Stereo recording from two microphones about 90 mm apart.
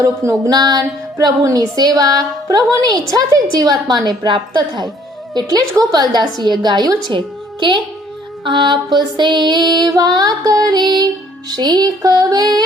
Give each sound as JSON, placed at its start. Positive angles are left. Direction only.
{"t": 0.0, "sound": "a woman's voice", "side_deg": -35}
{"t": 7.6, "sound": "a woman's voice", "side_deg": -70}